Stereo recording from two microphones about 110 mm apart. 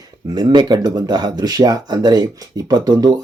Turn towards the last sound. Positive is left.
turn(degrees=-35)  # may be behind; listen again after turning